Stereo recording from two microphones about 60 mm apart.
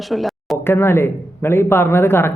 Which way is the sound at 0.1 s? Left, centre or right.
Centre.